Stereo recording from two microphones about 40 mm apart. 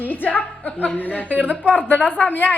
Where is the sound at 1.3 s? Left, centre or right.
Right.